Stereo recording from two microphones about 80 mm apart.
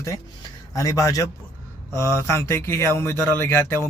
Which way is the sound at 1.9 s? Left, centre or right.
Left.